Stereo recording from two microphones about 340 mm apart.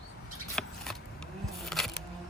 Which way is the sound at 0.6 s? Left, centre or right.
Centre.